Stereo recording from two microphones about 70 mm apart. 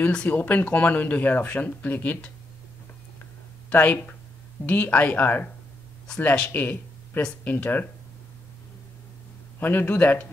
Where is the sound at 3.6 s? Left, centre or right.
Left.